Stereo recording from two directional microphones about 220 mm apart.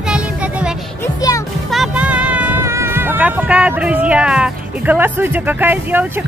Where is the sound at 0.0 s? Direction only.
5° right (ahead or behind).